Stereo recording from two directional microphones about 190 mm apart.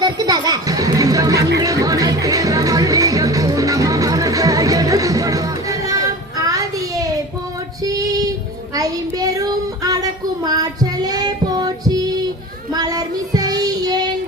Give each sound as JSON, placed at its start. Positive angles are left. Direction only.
{"t": 0.0, "sound": "chatter", "side_deg": -20}
{"t": 1.5, "sound": "music", "side_deg": -20}
{"t": 6.4, "sound": "child singing", "side_deg": -20}
{"t": 7.9, "sound": "female singing", "side_deg": -20}
{"t": 8.7, "sound": "child singing", "side_deg": -20}